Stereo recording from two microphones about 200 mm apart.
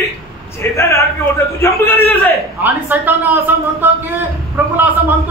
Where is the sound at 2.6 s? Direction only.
10° right (ahead or behind).